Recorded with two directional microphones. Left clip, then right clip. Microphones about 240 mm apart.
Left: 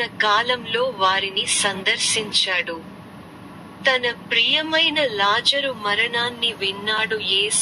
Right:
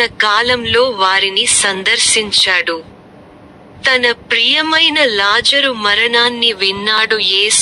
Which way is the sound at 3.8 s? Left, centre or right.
Right.